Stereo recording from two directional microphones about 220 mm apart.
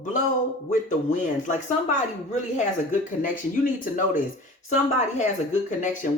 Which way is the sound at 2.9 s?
35° left (ahead or behind).